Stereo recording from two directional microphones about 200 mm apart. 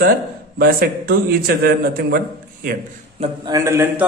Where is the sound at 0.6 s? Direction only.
45° right (ahead or behind).